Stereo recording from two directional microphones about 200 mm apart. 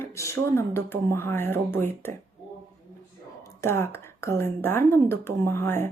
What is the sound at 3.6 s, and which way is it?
Speech, 10° left (ahead or behind).